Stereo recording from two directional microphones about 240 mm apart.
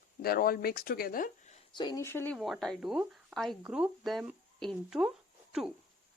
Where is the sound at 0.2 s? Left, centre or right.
Left.